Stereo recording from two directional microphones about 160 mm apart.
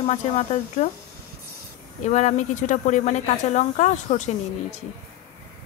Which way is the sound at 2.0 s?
45° left (ahead or behind).